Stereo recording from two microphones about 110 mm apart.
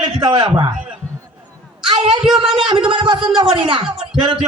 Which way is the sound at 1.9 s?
55° right (ahead or behind).